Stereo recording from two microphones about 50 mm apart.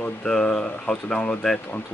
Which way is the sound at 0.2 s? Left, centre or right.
Centre.